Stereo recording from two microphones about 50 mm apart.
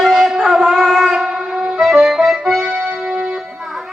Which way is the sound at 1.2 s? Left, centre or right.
Centre.